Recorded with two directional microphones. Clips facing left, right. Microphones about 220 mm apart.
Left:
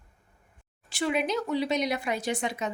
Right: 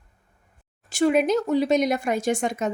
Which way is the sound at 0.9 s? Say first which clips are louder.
Right 8 dB; 45° right (ahead or behind).